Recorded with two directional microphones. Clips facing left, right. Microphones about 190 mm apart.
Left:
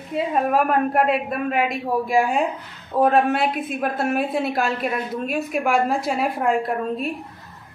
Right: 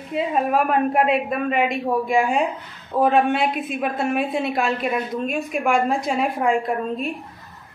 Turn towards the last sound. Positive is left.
turn(degrees=0)  # may be behind; listen again after turning